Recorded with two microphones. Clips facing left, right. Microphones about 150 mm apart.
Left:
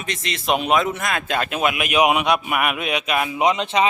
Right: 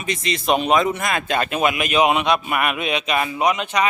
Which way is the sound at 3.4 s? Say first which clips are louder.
Left 3 dB; 25° left (ahead or behind).